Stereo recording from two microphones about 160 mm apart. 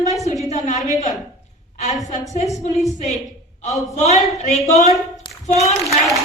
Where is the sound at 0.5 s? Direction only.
50° left (ahead or behind).